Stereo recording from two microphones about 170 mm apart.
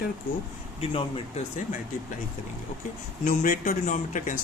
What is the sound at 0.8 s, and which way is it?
Speech, 35° left (ahead or behind).